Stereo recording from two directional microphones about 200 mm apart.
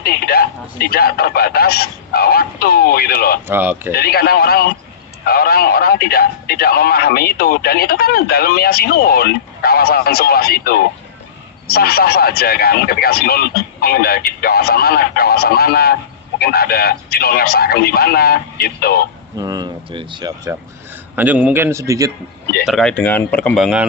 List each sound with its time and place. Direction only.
0.0 s speech: 50° left (ahead or behind)
3.4 s a man's voice: 10° right (ahead or behind)
3.9 s speech: 50° left (ahead or behind)
19.4 s speech: 20° right (ahead or behind)
21.2 s a man's voice: 5° right (ahead or behind)
22.6 s speech: centre (ahead or behind)